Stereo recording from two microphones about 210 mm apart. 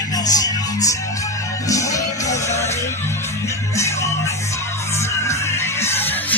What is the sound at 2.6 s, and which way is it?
Music, 10° left (ahead or behind).